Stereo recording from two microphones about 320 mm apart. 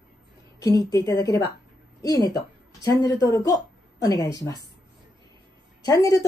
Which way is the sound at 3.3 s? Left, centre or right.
Centre.